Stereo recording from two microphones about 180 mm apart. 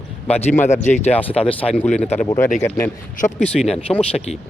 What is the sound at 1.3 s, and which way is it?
Speech, 30° left (ahead or behind).